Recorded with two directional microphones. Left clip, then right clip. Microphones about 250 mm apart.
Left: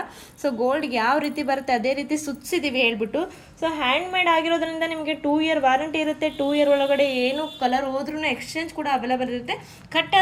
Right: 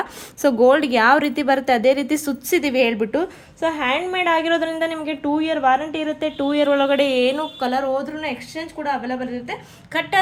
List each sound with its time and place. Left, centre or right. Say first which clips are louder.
0.4 s a woman's voice: right 8 dB; right; by 9.6 s centre